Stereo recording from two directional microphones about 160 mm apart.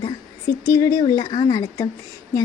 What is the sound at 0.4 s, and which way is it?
A woman's voice, 20° left (ahead or behind).